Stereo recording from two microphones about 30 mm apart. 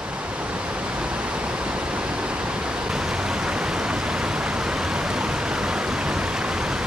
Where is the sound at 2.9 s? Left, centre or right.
Right.